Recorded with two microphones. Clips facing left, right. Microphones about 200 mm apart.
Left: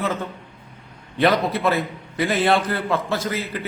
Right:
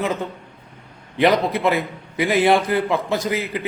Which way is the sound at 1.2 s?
15° right (ahead or behind).